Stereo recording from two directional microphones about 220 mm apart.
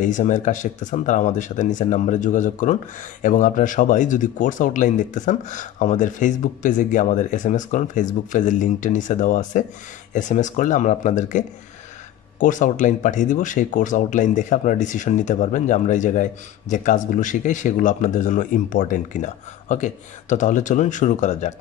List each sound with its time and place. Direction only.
0.0 s speech: 35° left (ahead or behind)